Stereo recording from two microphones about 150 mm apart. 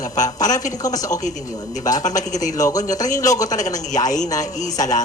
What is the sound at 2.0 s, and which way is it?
Speech, 55° left (ahead or behind).